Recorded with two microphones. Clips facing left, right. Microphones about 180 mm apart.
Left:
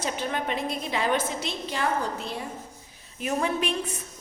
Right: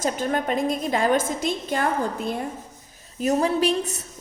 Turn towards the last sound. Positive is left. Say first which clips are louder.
# right 6 dB
turn(degrees=-40)  # may be behind; listen again after turning